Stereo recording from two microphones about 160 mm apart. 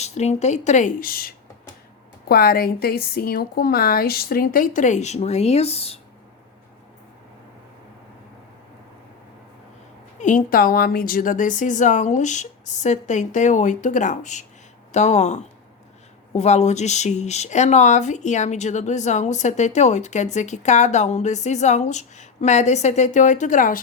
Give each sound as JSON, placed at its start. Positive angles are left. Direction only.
{"t": 0.0, "sound": "speech", "side_deg": 45}
{"t": 2.3, "sound": "speech", "side_deg": 65}
{"t": 10.2, "sound": "speech", "side_deg": 55}